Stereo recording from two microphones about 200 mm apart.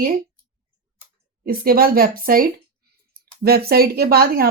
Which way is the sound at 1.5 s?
50° right (ahead or behind).